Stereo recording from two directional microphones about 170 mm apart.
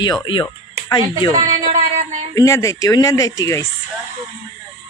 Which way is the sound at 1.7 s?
45° right (ahead or behind).